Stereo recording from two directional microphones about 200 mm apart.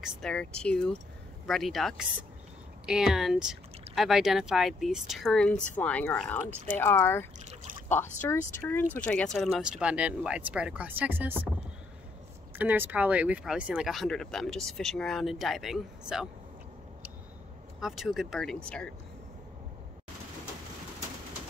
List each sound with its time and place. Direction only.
0.0 s speech: 5° left (ahead or behind)
12.5 s speech: 10° right (ahead or behind)
17.7 s speech: centre (ahead or behind)